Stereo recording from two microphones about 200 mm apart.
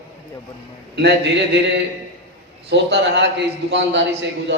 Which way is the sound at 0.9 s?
60° right (ahead or behind).